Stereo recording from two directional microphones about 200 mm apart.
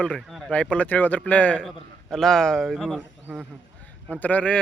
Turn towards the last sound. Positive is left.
turn(degrees=5)  # may be behind; listen again after turning